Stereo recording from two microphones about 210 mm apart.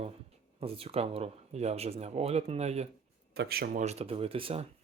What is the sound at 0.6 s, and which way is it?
Speech, 25° right (ahead or behind).